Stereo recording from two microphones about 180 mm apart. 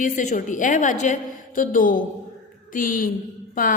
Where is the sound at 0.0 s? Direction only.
45° left (ahead or behind).